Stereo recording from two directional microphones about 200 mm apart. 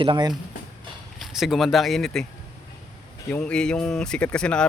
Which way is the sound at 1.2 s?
Centre (ahead or behind).